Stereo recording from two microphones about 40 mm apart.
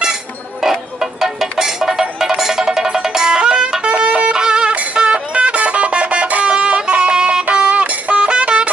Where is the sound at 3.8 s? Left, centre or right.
Right.